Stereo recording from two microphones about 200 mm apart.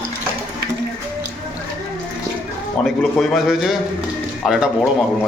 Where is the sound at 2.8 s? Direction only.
Centre (ahead or behind).